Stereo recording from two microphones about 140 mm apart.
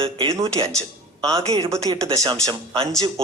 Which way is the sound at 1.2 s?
25° right (ahead or behind).